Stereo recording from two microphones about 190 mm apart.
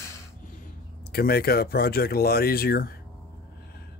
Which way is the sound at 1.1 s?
55° left (ahead or behind).